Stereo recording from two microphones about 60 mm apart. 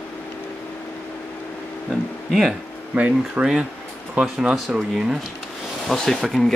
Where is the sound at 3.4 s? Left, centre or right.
Right.